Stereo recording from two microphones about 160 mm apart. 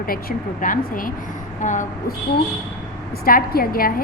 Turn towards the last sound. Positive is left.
turn(degrees=65)  # may be behind; listen again after turning